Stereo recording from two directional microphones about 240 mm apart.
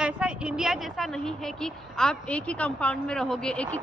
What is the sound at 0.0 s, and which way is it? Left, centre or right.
A man's voice, centre.